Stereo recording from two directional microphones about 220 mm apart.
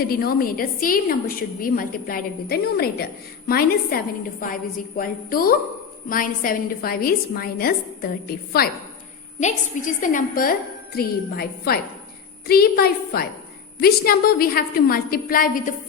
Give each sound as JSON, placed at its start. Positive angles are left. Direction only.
{"t": 0.0, "sound": "a woman's voice", "side_deg": 40}